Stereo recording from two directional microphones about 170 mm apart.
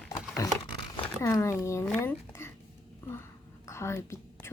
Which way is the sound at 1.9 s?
15° left (ahead or behind).